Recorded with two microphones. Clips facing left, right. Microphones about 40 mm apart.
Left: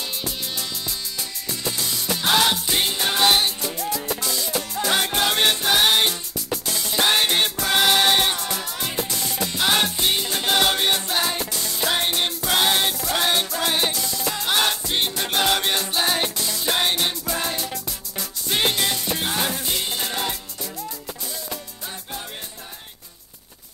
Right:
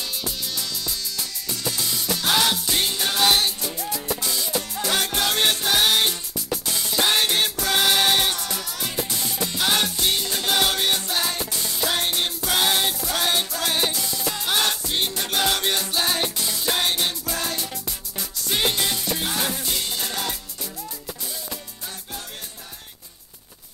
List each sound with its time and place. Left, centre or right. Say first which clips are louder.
1.6 s music: even; centre
11.5 s music: left 1 dB; centre
11.8 s music: left 2 dB; centre